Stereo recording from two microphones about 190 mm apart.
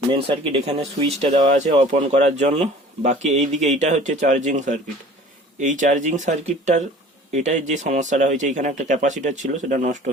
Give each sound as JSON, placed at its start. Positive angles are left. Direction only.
{"t": 0.1, "sound": "speech", "side_deg": -30}